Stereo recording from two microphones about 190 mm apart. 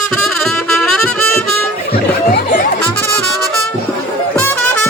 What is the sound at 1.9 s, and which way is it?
Music, 55° left (ahead or behind).